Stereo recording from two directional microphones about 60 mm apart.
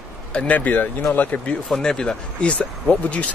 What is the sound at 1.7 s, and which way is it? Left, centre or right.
Speech, centre.